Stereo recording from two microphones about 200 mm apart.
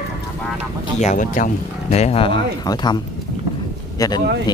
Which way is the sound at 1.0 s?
40° left (ahead or behind).